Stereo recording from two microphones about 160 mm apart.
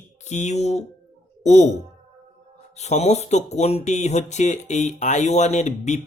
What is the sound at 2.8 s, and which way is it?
Speech, 45° left (ahead or behind).